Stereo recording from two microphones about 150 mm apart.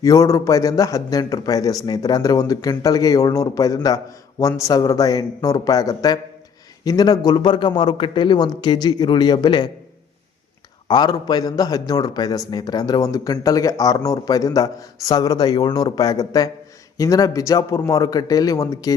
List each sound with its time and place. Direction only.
0.0 s a man's voice: 20° left (ahead or behind)
10.8 s a man's voice: 30° left (ahead or behind)